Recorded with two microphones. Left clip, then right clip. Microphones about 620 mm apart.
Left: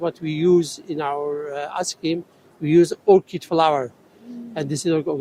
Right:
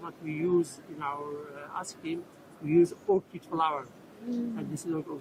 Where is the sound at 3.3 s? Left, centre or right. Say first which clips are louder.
Left 11 dB; left.